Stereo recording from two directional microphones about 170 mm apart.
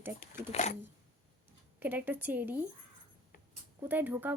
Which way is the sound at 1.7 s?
10° right (ahead or behind).